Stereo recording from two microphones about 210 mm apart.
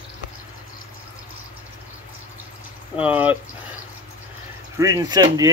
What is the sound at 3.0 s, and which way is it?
Speech, 5° right (ahead or behind).